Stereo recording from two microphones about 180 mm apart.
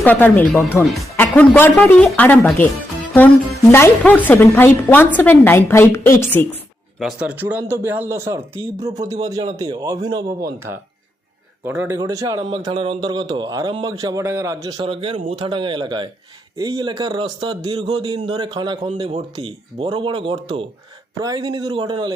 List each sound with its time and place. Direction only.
0.0 s a woman's voice: 10° left (ahead or behind)
3.7 s a woman's voice: 15° left (ahead or behind)
7.0 s a man's voice: 5° right (ahead or behind)
14.8 s a man's voice: 30° right (ahead or behind)